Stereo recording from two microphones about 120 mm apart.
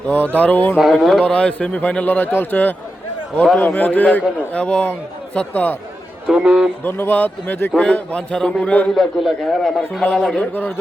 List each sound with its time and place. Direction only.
0.3 s a man's voice: 15° left (ahead or behind)
0.9 s a man's voice: centre (ahead or behind)
1.2 s a man's voice: 10° left (ahead or behind)
6.2 s a man's voice: 5° right (ahead or behind)
6.8 s a man's voice: 20° left (ahead or behind)
9.0 s a man's voice: centre (ahead or behind)
10.3 s a man's voice: 15° left (ahead or behind)